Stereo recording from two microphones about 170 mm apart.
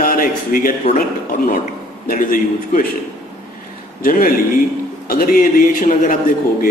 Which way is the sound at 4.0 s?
55° left (ahead or behind).